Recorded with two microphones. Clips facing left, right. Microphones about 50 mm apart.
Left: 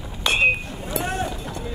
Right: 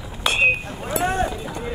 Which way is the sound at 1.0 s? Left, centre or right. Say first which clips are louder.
Right 5 dB; right.